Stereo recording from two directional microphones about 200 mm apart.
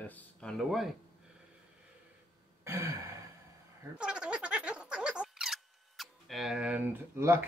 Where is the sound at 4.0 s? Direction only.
5° right (ahead or behind).